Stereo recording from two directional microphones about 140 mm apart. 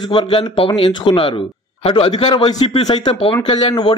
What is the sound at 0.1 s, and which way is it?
Speech, 40° left (ahead or behind).